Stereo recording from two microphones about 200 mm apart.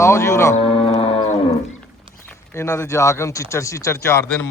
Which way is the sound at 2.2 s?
15° left (ahead or behind).